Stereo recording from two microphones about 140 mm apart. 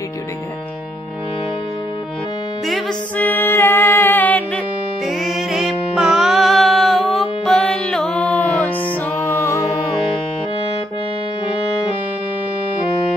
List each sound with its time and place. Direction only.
3.2 s music: 15° left (ahead or behind)
5.0 s music: centre (ahead or behind); by 9.7 s 20° left (ahead or behind)